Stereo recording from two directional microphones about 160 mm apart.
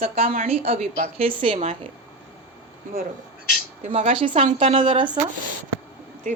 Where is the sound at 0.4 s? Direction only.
35° right (ahead or behind).